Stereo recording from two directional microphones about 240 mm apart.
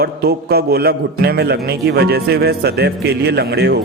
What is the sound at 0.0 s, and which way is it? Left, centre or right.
Speech, right.